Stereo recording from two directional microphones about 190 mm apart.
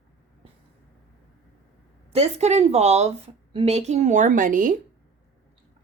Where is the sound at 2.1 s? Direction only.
35° right (ahead or behind).